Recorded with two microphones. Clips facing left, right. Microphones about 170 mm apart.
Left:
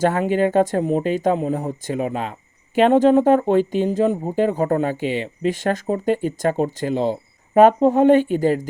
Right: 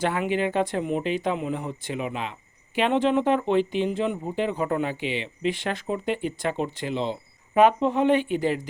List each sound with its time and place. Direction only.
0.0 s speech: 45° left (ahead or behind)